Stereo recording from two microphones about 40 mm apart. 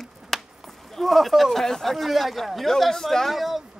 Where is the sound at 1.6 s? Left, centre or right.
Centre.